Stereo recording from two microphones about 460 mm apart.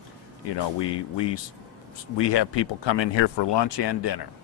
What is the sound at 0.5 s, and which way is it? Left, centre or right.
Speech, left.